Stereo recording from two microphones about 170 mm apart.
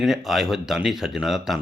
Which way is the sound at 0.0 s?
Centre (ahead or behind).